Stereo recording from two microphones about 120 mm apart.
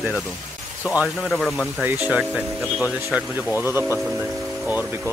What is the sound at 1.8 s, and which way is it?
Speech, 10° right (ahead or behind).